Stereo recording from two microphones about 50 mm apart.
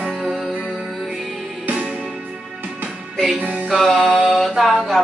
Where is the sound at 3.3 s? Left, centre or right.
Right.